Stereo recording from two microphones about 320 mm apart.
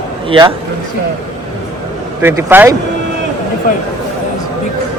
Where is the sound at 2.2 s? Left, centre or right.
Centre.